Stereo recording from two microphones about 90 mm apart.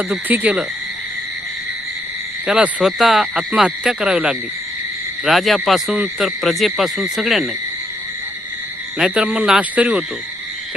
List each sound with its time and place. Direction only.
0.1 s frog: 20° right (ahead or behind)
2.5 s speech: 10° right (ahead or behind)
5.2 s owl: centre (ahead or behind)
9.0 s speech: 10° right (ahead or behind)